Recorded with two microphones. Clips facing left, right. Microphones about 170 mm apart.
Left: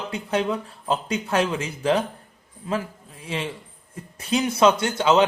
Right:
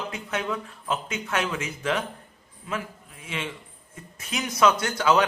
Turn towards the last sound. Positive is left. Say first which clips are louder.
# left 3 dB
turn(degrees=25)  # may be behind; listen again after turning